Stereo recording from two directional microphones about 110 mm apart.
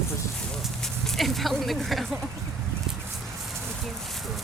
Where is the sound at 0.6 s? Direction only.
5° left (ahead or behind).